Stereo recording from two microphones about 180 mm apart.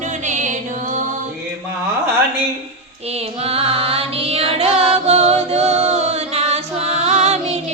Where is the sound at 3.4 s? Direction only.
35° right (ahead or behind).